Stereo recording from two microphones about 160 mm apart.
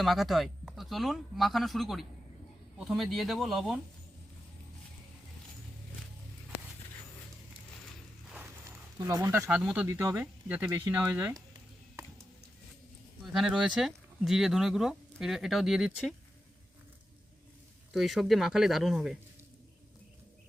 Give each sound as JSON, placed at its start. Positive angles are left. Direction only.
{"t": 0.0, "sound": "speech", "side_deg": 0}
{"t": 8.3, "sound": "a sound", "side_deg": -10}
{"t": 9.0, "sound": "speech", "side_deg": -20}
{"t": 9.5, "sound": "speech", "side_deg": -5}
{"t": 9.8, "sound": "speech", "side_deg": -15}
{"t": 13.2, "sound": "speech", "side_deg": 0}
{"t": 17.9, "sound": "speech", "side_deg": 0}